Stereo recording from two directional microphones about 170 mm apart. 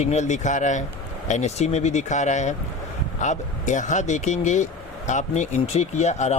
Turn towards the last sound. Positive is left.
turn(degrees=40)  # may be behind; listen again after turning